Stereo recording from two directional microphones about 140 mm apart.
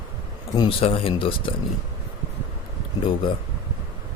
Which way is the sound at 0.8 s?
40° left (ahead or behind).